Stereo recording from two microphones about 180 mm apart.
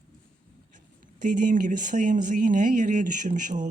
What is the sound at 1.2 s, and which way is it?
Speech, 45° right (ahead or behind).